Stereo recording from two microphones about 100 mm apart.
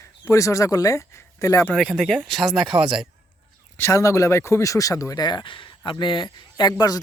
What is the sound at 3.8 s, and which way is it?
Speech, 30° left (ahead or behind).